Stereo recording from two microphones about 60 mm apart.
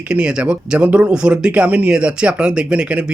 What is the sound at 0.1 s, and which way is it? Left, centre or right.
Speech, centre.